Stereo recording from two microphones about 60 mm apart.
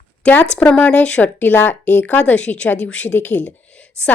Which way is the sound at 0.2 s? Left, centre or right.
Left.